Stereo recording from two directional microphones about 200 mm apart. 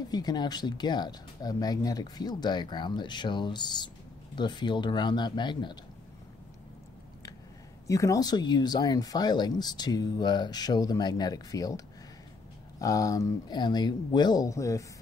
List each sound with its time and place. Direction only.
0.1 s speech: 20° left (ahead or behind)
7.8 s speech: 15° left (ahead or behind)